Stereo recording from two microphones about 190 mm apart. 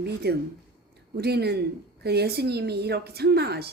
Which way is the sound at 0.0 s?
60° right (ahead or behind).